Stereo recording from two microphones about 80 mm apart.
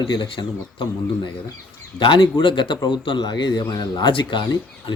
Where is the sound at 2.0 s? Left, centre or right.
Left.